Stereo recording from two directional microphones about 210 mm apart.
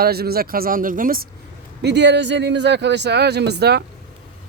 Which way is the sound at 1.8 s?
55° right (ahead or behind).